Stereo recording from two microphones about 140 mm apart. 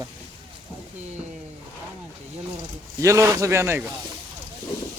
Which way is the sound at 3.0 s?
20° right (ahead or behind).